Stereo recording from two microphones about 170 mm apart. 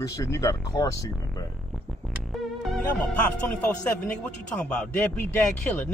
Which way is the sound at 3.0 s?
10° left (ahead or behind).